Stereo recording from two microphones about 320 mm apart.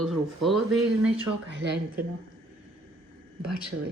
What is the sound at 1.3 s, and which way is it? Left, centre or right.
Speech, right.